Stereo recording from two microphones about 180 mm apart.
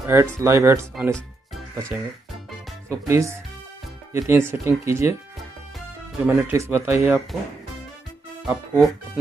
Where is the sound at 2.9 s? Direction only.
15° right (ahead or behind).